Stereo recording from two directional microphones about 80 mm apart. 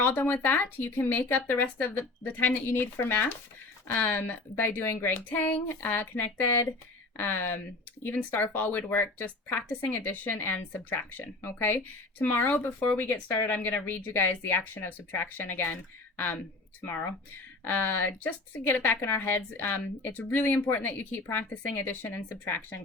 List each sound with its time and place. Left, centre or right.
0.0 s speech: left